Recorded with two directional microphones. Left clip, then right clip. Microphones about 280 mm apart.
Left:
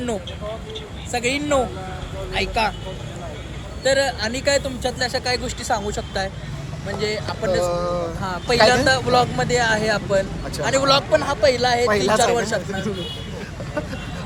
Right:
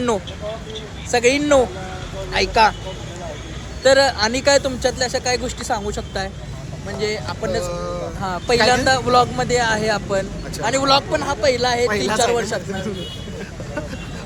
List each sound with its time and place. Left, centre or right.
1.1 s speech: right
3.8 s speech: right
7.7 s speech: centre
8.2 s speech: right
11.9 s speech: centre